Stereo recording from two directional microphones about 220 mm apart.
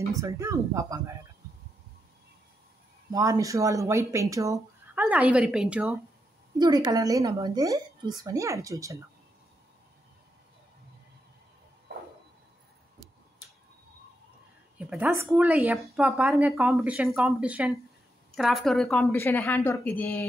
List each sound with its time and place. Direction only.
0.1 s speech: 15° right (ahead or behind)
3.1 s speech: 15° right (ahead or behind)
6.6 s speech: 20° right (ahead or behind)
11.9 s a sound: 50° right (ahead or behind)
14.8 s a woman's voice: 5° right (ahead or behind)